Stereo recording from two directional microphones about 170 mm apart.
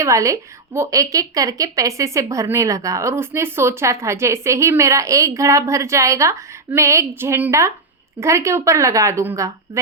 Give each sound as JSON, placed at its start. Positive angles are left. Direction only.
{"t": 0.0, "sound": "a woman's voice", "side_deg": -20}